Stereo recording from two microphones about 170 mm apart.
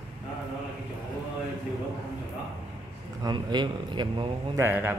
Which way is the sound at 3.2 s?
25° right (ahead or behind).